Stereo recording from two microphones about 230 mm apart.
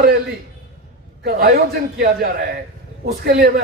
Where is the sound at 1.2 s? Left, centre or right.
Right.